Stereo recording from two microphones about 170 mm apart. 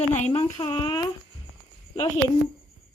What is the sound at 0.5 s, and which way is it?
Speech, 25° left (ahead or behind).